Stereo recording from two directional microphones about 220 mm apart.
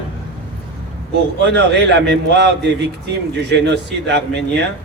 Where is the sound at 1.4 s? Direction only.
50° right (ahead or behind).